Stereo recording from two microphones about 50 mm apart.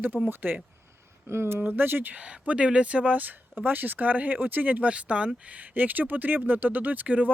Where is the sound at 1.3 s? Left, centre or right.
Right.